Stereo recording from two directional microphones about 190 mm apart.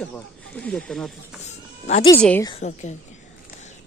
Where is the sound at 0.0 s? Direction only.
5° left (ahead or behind).